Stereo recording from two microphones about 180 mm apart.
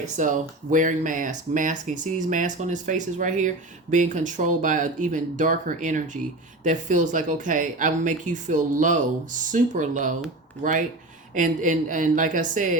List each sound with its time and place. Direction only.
0.2 s speech: 45° right (ahead or behind)